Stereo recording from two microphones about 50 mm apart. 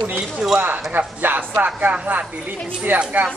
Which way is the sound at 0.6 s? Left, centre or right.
Right.